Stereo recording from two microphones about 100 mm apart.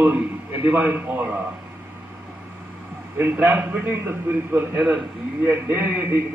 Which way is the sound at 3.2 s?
20° right (ahead or behind).